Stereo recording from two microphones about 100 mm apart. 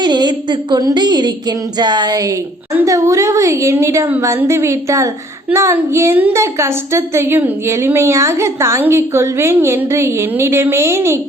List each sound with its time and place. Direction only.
0.0 s a woman's voice: 45° right (ahead or behind); by 11.2 s 25° right (ahead or behind)